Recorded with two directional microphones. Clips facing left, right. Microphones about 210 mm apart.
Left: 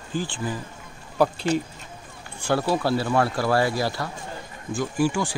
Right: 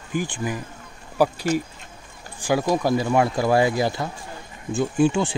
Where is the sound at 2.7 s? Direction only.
15° right (ahead or behind).